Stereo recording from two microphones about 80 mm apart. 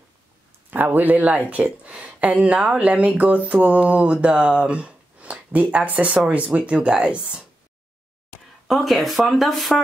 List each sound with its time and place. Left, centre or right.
0.7 s speech: right
8.6 s speech: centre